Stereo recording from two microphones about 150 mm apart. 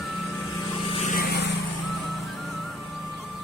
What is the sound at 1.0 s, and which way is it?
Vehicle, 70° left (ahead or behind).